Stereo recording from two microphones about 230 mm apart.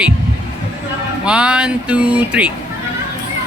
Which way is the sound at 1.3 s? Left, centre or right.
Centre.